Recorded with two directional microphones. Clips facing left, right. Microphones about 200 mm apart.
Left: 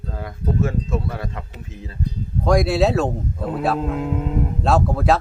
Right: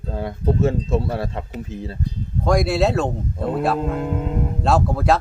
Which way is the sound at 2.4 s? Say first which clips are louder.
Left 1 dB; centre (ahead or behind).